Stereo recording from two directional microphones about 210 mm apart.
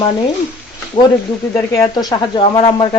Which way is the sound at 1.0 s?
20° left (ahead or behind).